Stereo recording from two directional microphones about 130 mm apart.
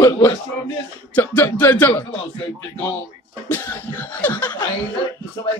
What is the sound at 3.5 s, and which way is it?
Speech, 15° left (ahead or behind).